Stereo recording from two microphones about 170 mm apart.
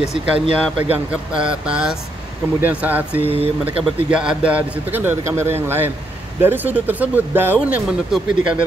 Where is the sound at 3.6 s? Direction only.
5° right (ahead or behind).